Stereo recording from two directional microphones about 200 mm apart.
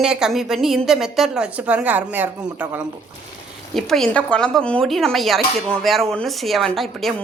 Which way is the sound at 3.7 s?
Centre (ahead or behind).